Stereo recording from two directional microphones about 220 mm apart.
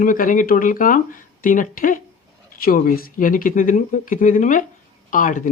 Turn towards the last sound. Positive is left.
turn(degrees=35)  # may be behind; listen again after turning